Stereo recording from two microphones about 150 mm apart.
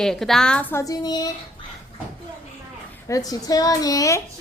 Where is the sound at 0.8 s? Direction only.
25° left (ahead or behind).